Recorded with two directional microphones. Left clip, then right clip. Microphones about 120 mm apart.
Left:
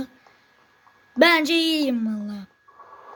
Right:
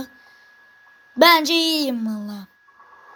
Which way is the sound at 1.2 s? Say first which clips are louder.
Right 3 dB; 20° left (ahead or behind).